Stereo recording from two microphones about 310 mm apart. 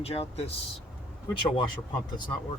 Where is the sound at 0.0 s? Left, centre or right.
Centre.